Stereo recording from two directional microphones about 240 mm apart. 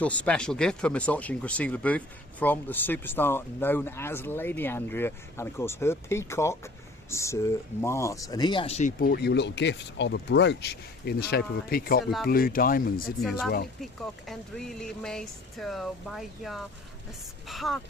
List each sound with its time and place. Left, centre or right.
0.0 s speech: centre; by 13.1 s left
13.2 s speech: centre